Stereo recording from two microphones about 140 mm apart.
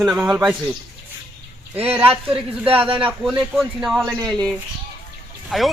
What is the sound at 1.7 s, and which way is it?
Speech, 45° right (ahead or behind).